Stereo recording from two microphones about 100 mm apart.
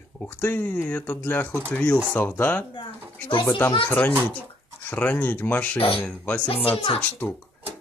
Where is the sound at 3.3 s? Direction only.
55° left (ahead or behind).